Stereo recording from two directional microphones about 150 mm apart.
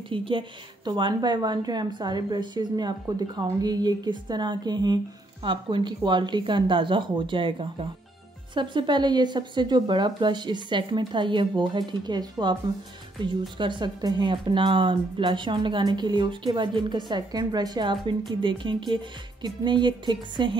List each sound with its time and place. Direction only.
0.1 s speech: 35° right (ahead or behind)